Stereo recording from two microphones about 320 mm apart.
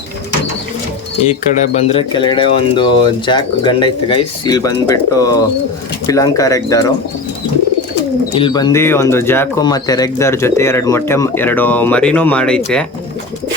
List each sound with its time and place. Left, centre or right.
1.5 s speech: left
8.3 s speech: centre